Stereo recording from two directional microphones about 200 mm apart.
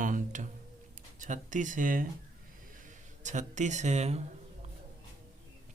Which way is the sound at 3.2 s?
35° right (ahead or behind).